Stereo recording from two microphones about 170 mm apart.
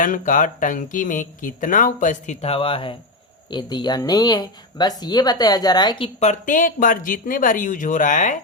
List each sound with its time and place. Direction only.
0.0 s speech: 50° left (ahead or behind)
2.4 s speech: 35° left (ahead or behind)
6.1 s speech: 45° left (ahead or behind)